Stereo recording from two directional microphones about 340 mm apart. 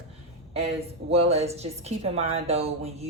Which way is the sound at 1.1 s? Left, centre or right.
Centre.